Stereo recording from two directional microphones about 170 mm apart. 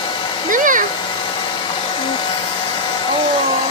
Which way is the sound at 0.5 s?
50° right (ahead or behind).